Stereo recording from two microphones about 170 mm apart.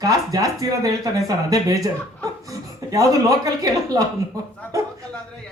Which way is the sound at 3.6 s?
20° right (ahead or behind).